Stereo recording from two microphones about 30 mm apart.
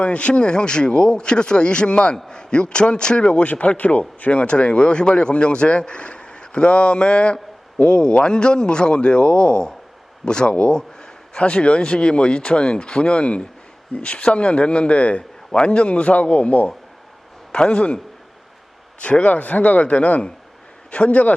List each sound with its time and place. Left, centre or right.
0.0 s a man's voice: left
3.4 s speech: left
4.3 s a man's voice: left
15.5 s a man's voice: left
17.5 s a man's voice: left
19.3 s speech: left
19.8 s a man's voice: left